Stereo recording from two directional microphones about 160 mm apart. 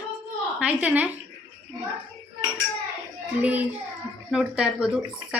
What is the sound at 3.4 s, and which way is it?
A woman's voice, 10° right (ahead or behind).